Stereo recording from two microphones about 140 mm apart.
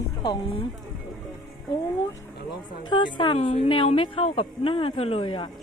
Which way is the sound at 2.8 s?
35° left (ahead or behind).